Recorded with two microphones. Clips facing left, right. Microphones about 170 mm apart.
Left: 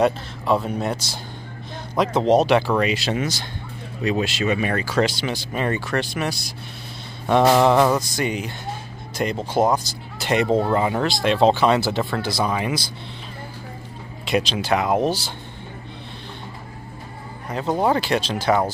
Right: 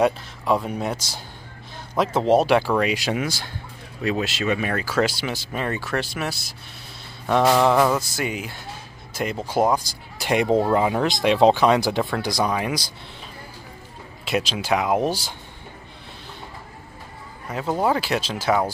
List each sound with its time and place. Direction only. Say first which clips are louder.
0.7 s speech: left 2 dB; 10° right (ahead or behind)
11.1 s speech: right 1 dB; 15° right (ahead or behind)
12.4 s speech: even; centre (ahead or behind)
14.2 s speech: left 3 dB; 5° right (ahead or behind)
17.5 s speech: left 2 dB; 5° right (ahead or behind)